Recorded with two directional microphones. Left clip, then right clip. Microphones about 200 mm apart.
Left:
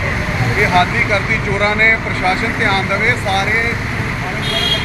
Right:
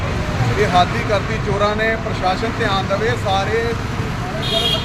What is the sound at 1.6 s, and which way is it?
Speech, 10° right (ahead or behind).